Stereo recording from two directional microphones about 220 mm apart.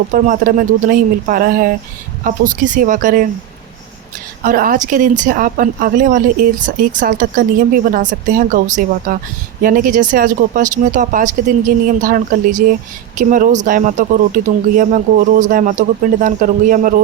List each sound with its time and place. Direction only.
0.1 s a man's voice: 35° right (ahead or behind)
4.4 s a man's voice: 40° right (ahead or behind)